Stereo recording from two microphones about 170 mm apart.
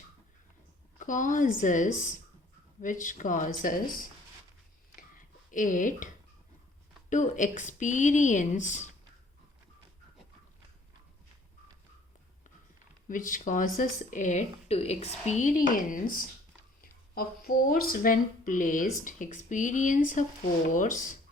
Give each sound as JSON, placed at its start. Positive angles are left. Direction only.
{"t": 0.9, "sound": "speech", "side_deg": 50}
{"t": 4.9, "sound": "a sound", "side_deg": 50}
{"t": 7.1, "sound": "speech", "side_deg": 50}
{"t": 13.1, "sound": "speech", "side_deg": 50}